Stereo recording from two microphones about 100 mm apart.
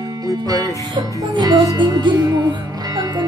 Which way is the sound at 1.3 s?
45° right (ahead or behind).